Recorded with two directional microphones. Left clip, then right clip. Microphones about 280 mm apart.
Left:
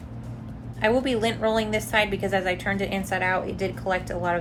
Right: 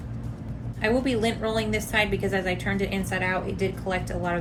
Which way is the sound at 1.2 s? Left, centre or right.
Left.